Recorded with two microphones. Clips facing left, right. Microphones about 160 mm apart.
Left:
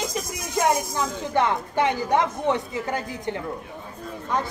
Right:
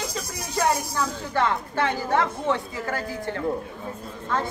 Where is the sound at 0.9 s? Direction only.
20° left (ahead or behind).